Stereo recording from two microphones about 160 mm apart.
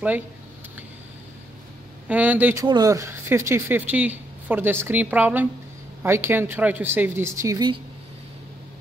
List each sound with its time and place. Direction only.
2.0 s speech: 10° right (ahead or behind)